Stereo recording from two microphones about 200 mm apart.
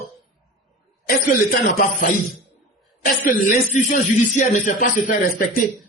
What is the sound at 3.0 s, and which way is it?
A man's voice, 45° left (ahead or behind).